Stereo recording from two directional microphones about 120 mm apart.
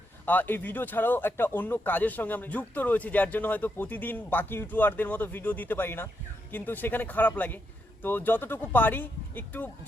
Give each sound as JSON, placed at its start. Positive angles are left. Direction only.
{"t": 0.3, "sound": "speech", "side_deg": 15}